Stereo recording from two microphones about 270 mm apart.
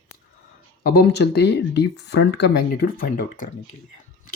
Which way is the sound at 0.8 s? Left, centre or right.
Left.